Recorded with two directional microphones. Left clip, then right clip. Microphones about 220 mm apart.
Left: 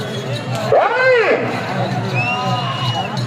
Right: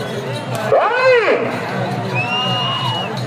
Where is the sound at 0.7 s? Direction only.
45° right (ahead or behind).